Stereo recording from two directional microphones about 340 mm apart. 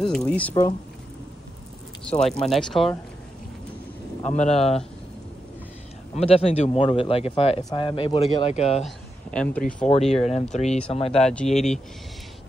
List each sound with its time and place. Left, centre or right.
0.0 s speech: centre
2.0 s speech: centre
4.2 s speech: centre
6.1 s speech: centre
8.8 s a man's voice: centre
9.8 s speech: centre
11.1 s speech: centre